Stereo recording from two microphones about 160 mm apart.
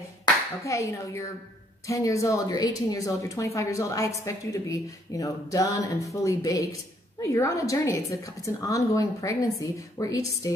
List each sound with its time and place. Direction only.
0.2 s a woman's voice: 20° left (ahead or behind)